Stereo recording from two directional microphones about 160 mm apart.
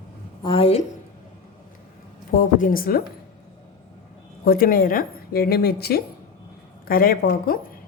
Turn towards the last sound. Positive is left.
turn(degrees=65)  # may be behind; listen again after turning